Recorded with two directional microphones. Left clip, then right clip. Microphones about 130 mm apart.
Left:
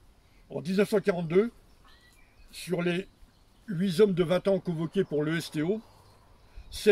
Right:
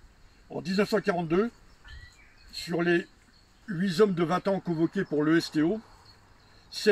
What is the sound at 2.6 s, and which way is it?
A man's voice, 60° left (ahead or behind).